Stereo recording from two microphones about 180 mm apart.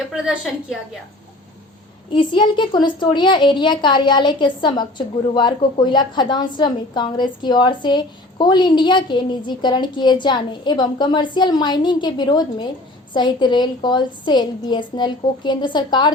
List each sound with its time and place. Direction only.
2.1 s a woman's voice: 25° left (ahead or behind)